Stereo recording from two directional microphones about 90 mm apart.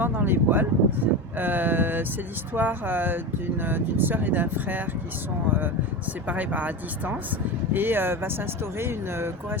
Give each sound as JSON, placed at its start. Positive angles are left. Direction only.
{"t": 0.0, "sound": "speech", "side_deg": -20}